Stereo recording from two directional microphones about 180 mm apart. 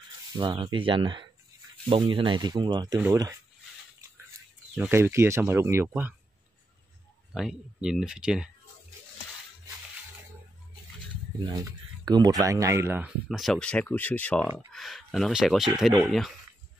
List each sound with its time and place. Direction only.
0.3 s speech: 25° right (ahead or behind)
4.9 s speech: 15° right (ahead or behind)
7.3 s speech: 5° right (ahead or behind)
11.3 s speech: 20° right (ahead or behind); by 16.3 s centre (ahead or behind)